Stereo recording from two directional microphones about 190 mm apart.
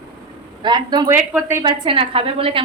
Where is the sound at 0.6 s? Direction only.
25° right (ahead or behind).